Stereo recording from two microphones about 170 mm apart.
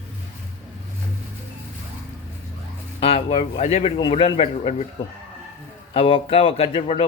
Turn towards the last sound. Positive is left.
turn(degrees=35)  # may be behind; listen again after turning